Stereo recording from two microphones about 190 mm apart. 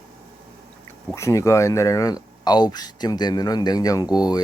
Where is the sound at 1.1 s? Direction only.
15° left (ahead or behind).